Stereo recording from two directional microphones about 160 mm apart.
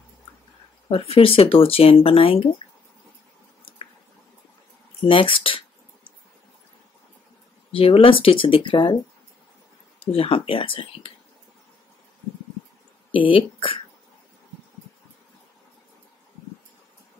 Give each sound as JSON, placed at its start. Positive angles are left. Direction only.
{"t": 0.8, "sound": "speech", "side_deg": 35}
{"t": 5.0, "sound": "speech", "side_deg": 35}
{"t": 7.7, "sound": "speech", "side_deg": 35}
{"t": 10.1, "sound": "speech", "side_deg": 35}
{"t": 13.1, "sound": "speech", "side_deg": 35}